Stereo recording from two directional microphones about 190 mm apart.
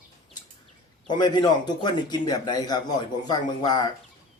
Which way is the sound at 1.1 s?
20° left (ahead or behind).